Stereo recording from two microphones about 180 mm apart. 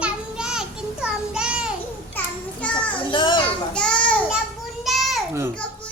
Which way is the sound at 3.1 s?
25° left (ahead or behind).